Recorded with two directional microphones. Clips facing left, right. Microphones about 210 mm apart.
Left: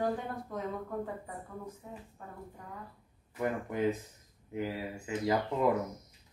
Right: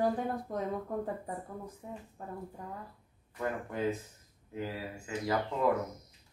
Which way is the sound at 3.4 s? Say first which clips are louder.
Left 2 dB; 15° left (ahead or behind).